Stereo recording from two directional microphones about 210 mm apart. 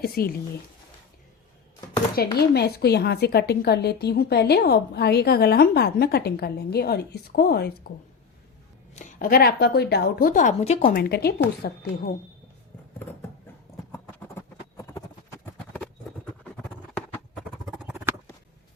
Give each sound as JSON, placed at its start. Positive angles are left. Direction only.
{"t": 0.0, "sound": "a woman's voice", "side_deg": 45}
{"t": 2.4, "sound": "a woman's voice", "side_deg": 50}
{"t": 9.0, "sound": "a woman's voice", "side_deg": 40}
{"t": 14.8, "sound": "clip-clop", "side_deg": 15}
{"t": 17.7, "sound": "a sound", "side_deg": -5}